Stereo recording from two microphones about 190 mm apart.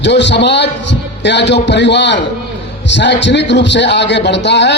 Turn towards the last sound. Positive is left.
turn(degrees=65)  # may be behind; listen again after turning